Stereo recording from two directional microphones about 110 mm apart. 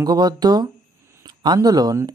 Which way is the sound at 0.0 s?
35° right (ahead or behind).